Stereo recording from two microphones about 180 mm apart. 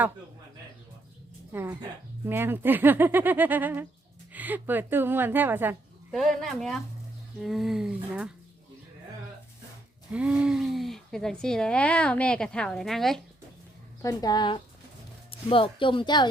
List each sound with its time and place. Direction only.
1.5 s speech: 10° right (ahead or behind)
6.1 s speech: centre (ahead or behind)
10.1 s speech: 5° right (ahead or behind)
14.0 s speech: 20° left (ahead or behind)